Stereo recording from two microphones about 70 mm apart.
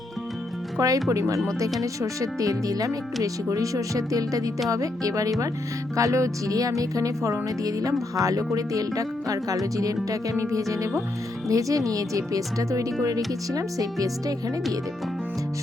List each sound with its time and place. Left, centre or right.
0.8 s speech: right